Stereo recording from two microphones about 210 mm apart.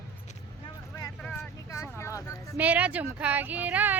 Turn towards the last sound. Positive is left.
turn(degrees=-10)  # may be behind; listen again after turning